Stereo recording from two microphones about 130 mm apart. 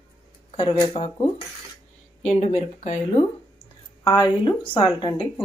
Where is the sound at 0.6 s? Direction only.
40° left (ahead or behind).